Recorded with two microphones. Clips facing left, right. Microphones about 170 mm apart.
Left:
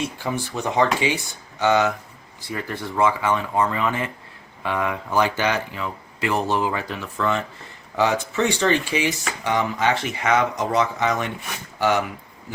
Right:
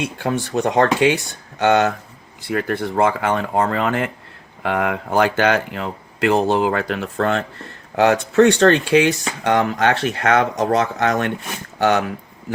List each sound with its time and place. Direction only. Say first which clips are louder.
0.0 s speech: right 4 dB; 70° right (ahead or behind)
6.3 s speech: right 5 dB; 20° right (ahead or behind)
6.7 s speech: right 6 dB; 70° right (ahead or behind)